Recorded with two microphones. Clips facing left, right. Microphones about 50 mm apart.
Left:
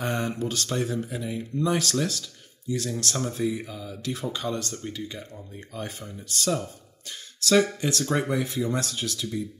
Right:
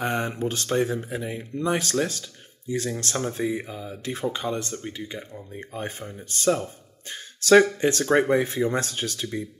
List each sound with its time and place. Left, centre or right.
0.0 s speech: right